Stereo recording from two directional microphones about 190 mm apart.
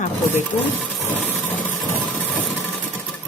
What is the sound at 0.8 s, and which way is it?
Sewing machine, centre (ahead or behind).